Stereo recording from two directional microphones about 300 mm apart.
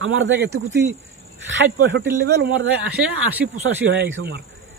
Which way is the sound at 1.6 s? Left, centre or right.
Right.